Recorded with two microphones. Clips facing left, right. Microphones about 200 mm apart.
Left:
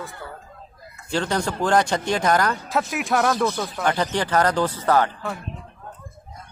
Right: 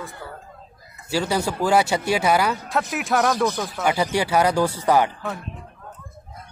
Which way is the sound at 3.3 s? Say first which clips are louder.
Right 1 dB; 15° right (ahead or behind).